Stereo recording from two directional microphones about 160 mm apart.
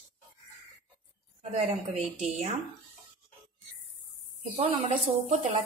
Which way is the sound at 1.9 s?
45° right (ahead or behind).